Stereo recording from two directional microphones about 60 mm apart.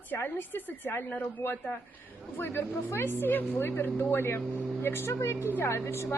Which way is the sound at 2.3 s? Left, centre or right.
Left.